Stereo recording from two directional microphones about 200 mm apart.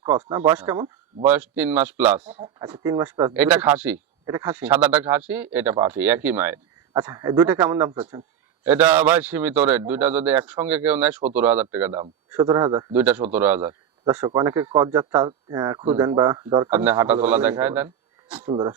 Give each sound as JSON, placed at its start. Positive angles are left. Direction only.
{"t": 0.3, "sound": "a man's voice", "side_deg": -10}
{"t": 2.7, "sound": "speech", "side_deg": -20}
{"t": 3.3, "sound": "a man's voice", "side_deg": -10}
{"t": 12.9, "sound": "a man's voice", "side_deg": -10}
{"t": 18.4, "sound": "speech", "side_deg": -20}